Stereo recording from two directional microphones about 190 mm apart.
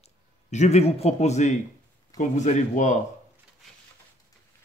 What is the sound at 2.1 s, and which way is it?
Speech, 40° left (ahead or behind).